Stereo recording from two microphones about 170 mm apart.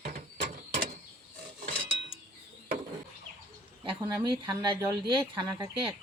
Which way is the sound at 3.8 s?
30° right (ahead or behind).